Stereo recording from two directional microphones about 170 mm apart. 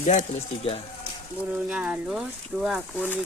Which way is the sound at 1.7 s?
10° right (ahead or behind).